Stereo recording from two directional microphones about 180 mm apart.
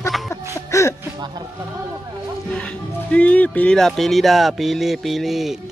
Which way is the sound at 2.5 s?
5° left (ahead or behind).